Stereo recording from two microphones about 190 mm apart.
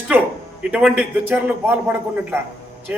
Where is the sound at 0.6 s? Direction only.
5° right (ahead or behind).